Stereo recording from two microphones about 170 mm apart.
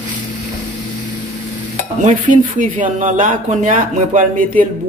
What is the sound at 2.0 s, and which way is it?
Speech, 45° right (ahead or behind).